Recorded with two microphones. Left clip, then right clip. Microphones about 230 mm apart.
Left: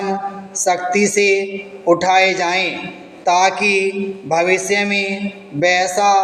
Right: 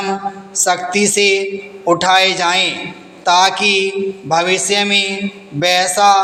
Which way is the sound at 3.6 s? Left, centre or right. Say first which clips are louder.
Right 2 dB; right.